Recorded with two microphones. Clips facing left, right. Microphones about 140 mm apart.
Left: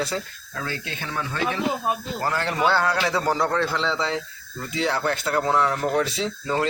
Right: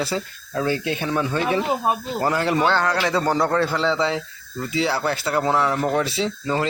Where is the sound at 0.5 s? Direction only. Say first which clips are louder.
Right 9 dB; 15° right (ahead or behind).